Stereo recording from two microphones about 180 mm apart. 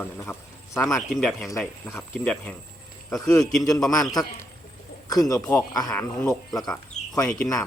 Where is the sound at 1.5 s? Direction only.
15° left (ahead or behind).